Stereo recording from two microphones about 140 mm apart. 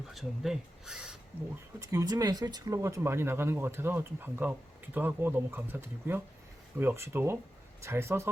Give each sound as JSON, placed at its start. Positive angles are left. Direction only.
{"t": 0.1, "sound": "speech", "side_deg": 0}
{"t": 1.8, "sound": "speech", "side_deg": -25}